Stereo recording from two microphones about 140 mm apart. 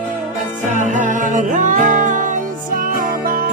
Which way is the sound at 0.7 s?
60° right (ahead or behind).